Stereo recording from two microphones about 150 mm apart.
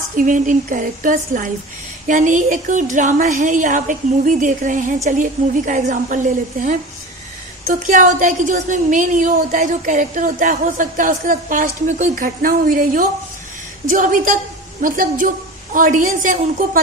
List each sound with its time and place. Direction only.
0.1 s a woman's voice: 60° right (ahead or behind)